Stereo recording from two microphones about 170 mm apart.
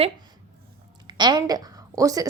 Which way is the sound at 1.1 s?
25° right (ahead or behind).